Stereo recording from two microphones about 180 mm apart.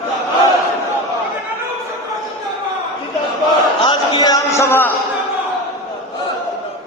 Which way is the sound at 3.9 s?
25° left (ahead or behind).